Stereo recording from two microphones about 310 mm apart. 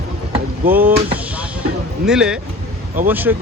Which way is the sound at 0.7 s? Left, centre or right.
Centre.